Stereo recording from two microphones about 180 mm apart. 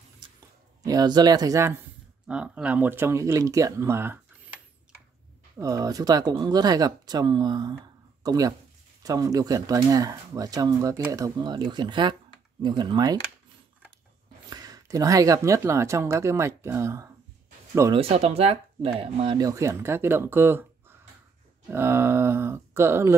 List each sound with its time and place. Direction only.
0.8 s speech: 20° right (ahead or behind)
2.2 s speech: 5° right (ahead or behind)
5.6 s speech: 20° right (ahead or behind)
14.5 s speech: 20° right (ahead or behind)
17.9 s speech: 35° right (ahead or behind); by 23.1 s 15° right (ahead or behind)